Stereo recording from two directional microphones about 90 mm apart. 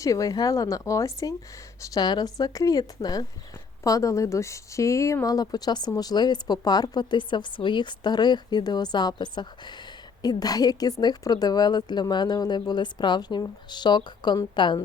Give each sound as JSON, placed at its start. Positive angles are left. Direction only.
{"t": 0.0, "sound": "a woman's voice", "side_deg": 40}
{"t": 10.2, "sound": "a woman's voice", "side_deg": 45}